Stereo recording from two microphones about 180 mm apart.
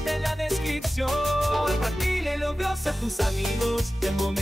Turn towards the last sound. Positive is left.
turn(degrees=0)  # may be behind; listen again after turning